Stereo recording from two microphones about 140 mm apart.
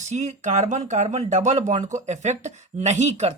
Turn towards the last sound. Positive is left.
turn(degrees=-55)  # may be behind; listen again after turning